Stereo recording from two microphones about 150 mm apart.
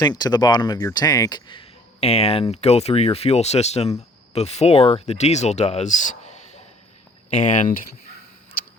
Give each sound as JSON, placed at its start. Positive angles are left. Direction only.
{"t": 0.0, "sound": "speech", "side_deg": 25}